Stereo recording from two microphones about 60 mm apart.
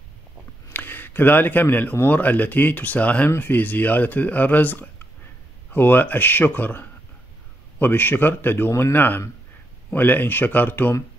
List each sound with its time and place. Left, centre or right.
0.7 s speech: left